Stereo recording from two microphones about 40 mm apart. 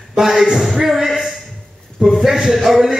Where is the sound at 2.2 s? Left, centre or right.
Centre.